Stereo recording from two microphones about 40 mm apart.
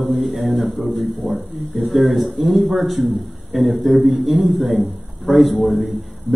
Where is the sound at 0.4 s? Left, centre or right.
Centre.